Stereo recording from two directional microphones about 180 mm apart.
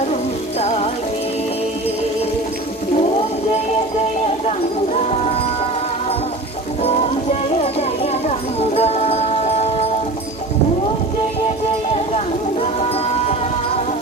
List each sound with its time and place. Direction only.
3.0 s whale vocalization: 35° left (ahead or behind)
6.8 s music: 35° left (ahead or behind)